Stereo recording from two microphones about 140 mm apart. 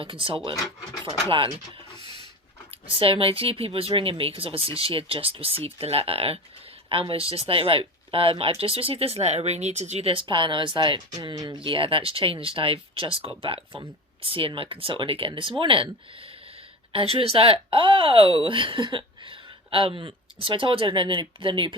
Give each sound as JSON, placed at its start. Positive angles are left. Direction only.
{"t": 0.0, "sound": "speech", "side_deg": -40}
{"t": 2.9, "sound": "speech", "side_deg": -40}